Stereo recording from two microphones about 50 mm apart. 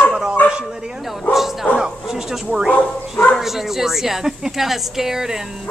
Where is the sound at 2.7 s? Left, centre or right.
Left.